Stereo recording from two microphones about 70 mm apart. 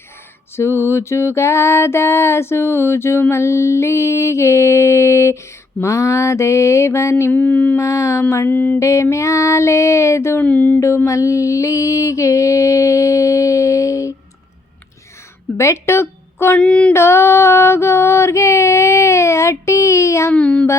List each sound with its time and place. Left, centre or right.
0.5 s music: left
7.3 s a sound: left
7.8 s music: left
8.4 s a sound: left
8.8 s music: left
10.4 s a sound: left
10.8 s mantra: left
15.5 s speech: left
16.6 s female singing: centre
16.9 s female singing: left
20.3 s female singing: centre